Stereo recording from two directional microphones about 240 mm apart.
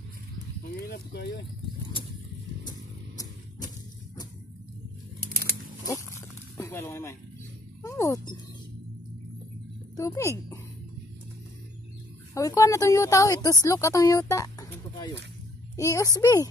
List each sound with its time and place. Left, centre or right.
0.9 s speech: left
6.5 s speech: centre
7.8 s a sound: centre
9.9 s speech: centre
12.4 s speech: centre